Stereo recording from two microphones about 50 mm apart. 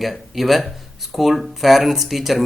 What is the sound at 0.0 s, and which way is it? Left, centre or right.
Speech, centre.